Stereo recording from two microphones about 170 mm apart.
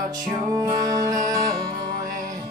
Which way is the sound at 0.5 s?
20° right (ahead or behind).